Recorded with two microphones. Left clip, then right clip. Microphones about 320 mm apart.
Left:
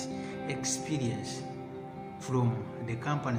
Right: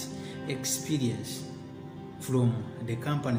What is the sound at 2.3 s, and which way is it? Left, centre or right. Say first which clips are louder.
Speech: right 2 dB; left.